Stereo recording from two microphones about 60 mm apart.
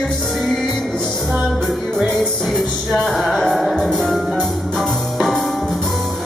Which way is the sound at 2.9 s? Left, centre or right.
Centre.